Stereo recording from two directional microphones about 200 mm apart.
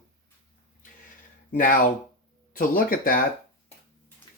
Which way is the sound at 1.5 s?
45° left (ahead or behind).